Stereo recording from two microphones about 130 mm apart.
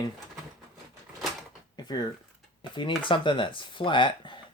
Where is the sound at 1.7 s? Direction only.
30° left (ahead or behind).